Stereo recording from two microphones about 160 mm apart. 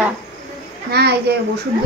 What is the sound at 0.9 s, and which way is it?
Speech, 90° right.